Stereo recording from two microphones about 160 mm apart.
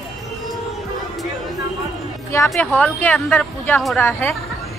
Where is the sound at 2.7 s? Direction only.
10° left (ahead or behind).